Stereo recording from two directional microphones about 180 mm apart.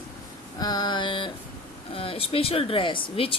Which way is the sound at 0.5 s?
20° left (ahead or behind).